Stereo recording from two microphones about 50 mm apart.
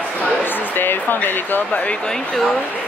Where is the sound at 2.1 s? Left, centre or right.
Centre.